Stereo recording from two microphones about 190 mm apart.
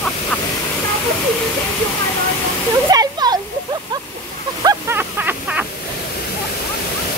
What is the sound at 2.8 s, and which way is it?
Waterfall, 20° right (ahead or behind).